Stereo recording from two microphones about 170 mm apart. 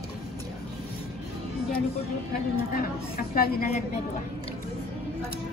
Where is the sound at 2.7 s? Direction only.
60° left (ahead or behind).